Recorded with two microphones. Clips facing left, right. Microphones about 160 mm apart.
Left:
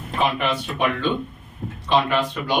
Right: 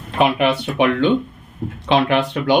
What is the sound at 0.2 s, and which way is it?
Speech, 75° right (ahead or behind).